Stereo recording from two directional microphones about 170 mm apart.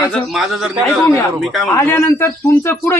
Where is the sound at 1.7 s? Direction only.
15° left (ahead or behind).